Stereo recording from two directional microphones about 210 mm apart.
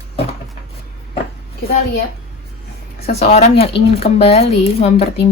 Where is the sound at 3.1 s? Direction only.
30° left (ahead or behind).